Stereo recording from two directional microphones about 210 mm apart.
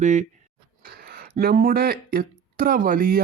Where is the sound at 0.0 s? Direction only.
35° right (ahead or behind).